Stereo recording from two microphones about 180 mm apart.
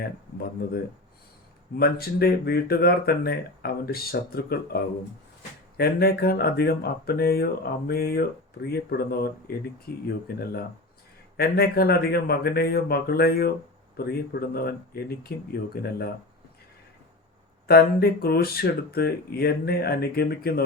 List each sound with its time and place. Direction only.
1.8 s speech: 60° left (ahead or behind)
17.7 s speech: 60° left (ahead or behind)